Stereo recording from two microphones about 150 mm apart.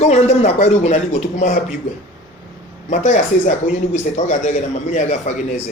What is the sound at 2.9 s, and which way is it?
A man's voice, 55° left (ahead or behind).